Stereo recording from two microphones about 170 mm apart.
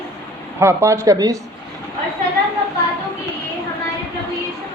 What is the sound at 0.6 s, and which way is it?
Speech, 15° right (ahead or behind).